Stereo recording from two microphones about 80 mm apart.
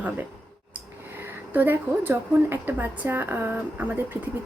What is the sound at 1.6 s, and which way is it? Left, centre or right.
A woman's voice, right.